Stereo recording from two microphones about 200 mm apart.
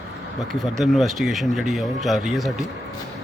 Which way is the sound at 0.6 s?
Centre (ahead or behind).